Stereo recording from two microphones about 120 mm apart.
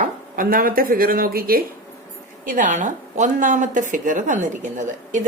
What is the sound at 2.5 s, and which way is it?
A woman's voice, 90° right.